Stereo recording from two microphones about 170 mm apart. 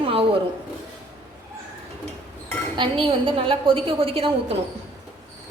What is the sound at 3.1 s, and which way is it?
A woman's voice, 30° right (ahead or behind).